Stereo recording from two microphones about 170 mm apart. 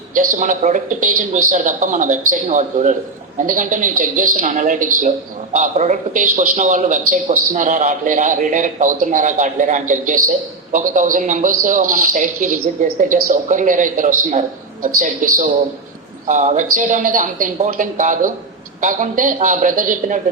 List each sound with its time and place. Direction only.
0.1 s a man's voice: 50° right (ahead or behind)